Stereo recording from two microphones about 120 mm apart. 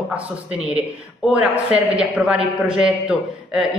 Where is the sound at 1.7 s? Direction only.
5° right (ahead or behind).